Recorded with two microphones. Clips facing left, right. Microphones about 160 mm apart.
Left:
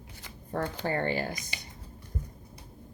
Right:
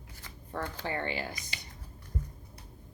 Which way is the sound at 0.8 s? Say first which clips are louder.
Left 5 dB; 45° left (ahead or behind).